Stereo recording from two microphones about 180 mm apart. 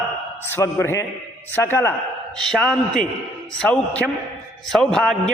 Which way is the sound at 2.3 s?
5° left (ahead or behind).